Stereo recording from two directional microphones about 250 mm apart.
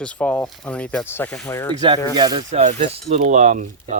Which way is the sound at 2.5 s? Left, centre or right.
Right.